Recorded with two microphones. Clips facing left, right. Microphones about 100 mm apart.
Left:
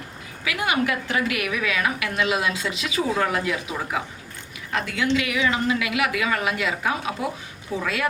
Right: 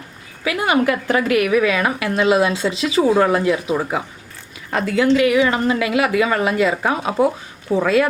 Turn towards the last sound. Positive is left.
turn(degrees=-35)  # may be behind; listen again after turning